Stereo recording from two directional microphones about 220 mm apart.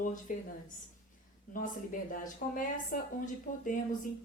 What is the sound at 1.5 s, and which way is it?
Speech, 40° left (ahead or behind).